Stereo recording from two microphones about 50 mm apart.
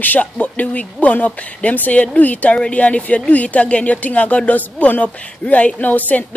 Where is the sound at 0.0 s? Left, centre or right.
Left.